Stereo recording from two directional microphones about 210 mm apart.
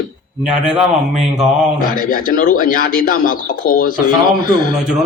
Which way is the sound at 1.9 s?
40° left (ahead or behind).